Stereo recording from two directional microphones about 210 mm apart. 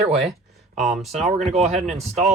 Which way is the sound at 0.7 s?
35° right (ahead or behind).